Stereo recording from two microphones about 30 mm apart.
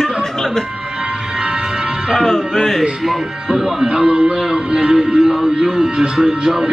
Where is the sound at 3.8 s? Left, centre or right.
Right.